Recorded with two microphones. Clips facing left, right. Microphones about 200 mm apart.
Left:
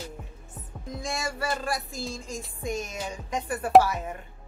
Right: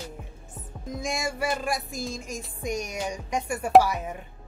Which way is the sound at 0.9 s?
15° right (ahead or behind).